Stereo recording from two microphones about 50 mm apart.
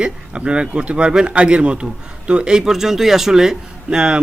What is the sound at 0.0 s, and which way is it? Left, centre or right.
A man's voice, centre.